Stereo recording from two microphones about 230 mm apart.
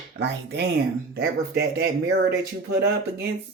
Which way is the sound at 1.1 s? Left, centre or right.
Right.